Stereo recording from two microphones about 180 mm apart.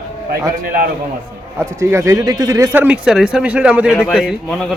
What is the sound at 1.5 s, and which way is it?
Speech, 15° right (ahead or behind).